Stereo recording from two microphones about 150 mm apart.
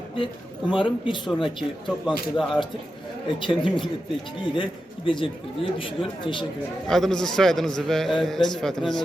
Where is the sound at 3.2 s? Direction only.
30° left (ahead or behind).